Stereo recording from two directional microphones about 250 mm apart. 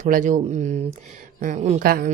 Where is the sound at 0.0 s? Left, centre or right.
Right.